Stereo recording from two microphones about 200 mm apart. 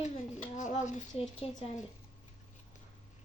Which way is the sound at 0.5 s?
40° left (ahead or behind).